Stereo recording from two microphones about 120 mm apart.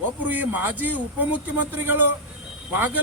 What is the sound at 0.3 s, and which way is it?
Speech, 15° right (ahead or behind).